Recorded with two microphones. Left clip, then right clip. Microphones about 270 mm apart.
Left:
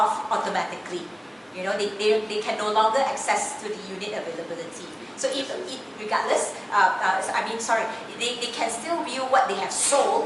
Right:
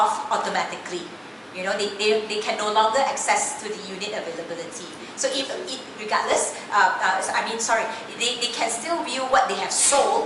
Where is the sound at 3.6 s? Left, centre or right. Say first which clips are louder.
Right 1 dB; centre.